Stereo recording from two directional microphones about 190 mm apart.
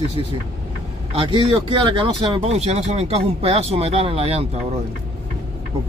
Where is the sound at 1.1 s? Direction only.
30° right (ahead or behind).